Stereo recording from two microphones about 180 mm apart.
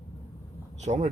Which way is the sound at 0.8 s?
40° right (ahead or behind).